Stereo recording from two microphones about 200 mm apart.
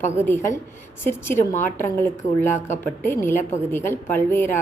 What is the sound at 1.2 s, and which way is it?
A woman's voice, 10° left (ahead or behind).